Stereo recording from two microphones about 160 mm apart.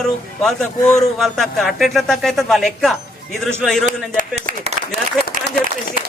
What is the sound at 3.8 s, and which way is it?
Speech, 55° right (ahead or behind).